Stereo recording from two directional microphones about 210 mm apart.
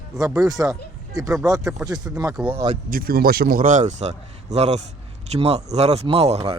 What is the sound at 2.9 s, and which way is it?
A man's voice, 45° right (ahead or behind).